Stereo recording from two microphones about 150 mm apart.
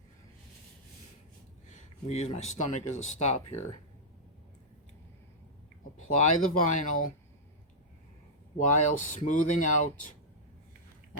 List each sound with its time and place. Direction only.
1.7 s speech: 50° left (ahead or behind)
6.1 s speech: 60° left (ahead or behind)
8.5 s speech: 55° left (ahead or behind)